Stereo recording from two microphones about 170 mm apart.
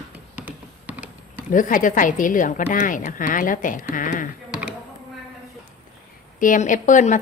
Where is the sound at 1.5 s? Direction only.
50° left (ahead or behind).